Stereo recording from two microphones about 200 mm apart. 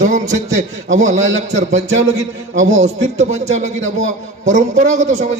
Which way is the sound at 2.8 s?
35° right (ahead or behind).